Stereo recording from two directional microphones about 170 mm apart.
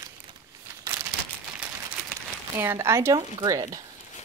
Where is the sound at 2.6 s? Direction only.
15° right (ahead or behind).